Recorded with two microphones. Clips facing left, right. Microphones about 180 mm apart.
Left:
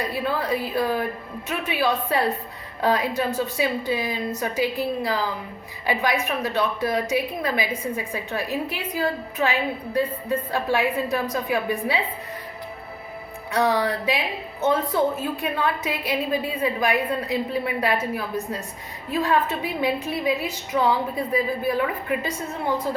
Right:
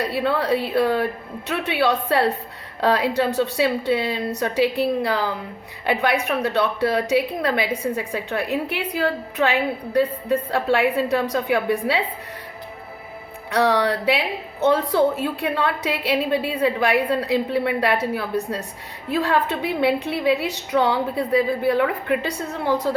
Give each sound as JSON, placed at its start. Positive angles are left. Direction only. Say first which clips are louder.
{"t": 0.0, "sound": "a woman's voice", "louder": "right 4 dB", "side_deg": -70}
{"t": 13.5, "sound": "a woman's voice", "louder": "right 3 dB", "side_deg": -70}
{"t": 19.1, "sound": "a woman's voice", "louder": "right 1 dB", "side_deg": -75}